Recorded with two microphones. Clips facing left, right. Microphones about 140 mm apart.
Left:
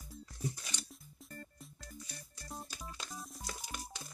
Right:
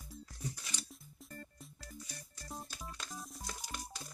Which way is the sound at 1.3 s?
Centre (ahead or behind).